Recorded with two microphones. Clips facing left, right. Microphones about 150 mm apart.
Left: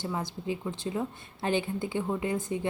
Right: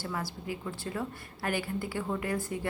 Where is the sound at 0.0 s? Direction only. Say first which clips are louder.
Left 3 dB; 20° left (ahead or behind).